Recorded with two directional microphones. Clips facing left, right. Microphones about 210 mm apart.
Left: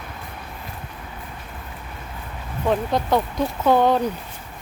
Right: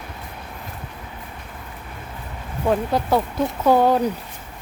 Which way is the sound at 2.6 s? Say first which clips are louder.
Right 1 dB; 5° right (ahead or behind).